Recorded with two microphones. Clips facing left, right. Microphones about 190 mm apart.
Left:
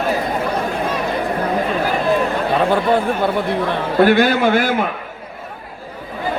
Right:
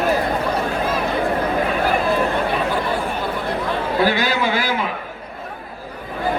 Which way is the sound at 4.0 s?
55° left (ahead or behind).